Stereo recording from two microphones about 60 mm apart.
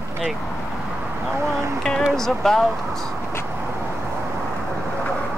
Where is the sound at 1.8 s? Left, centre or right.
Centre.